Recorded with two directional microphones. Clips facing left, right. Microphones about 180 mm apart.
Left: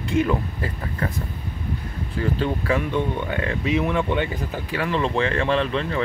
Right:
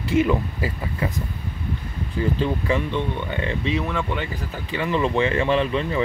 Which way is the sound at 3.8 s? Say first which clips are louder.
Left 3 dB; 15° left (ahead or behind).